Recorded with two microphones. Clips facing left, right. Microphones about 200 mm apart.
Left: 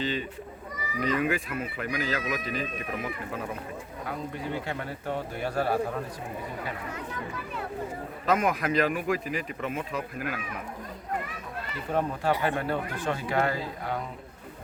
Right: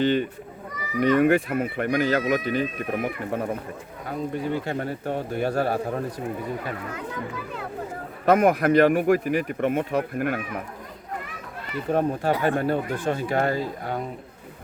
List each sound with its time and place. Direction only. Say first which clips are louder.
0.0 s speech: right 9 dB; 65° right (ahead or behind)
4.6 s speech: right 6 dB; 45° right (ahead or behind)
8.2 s speech: right 8 dB; 60° right (ahead or behind)
11.9 s speech: right 4 dB; 45° right (ahead or behind)